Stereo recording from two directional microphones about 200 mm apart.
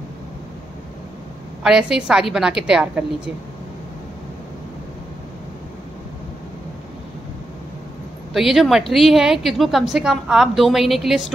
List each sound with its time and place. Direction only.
1.6 s a woman's voice: 5° right (ahead or behind)
8.3 s a woman's voice: centre (ahead or behind)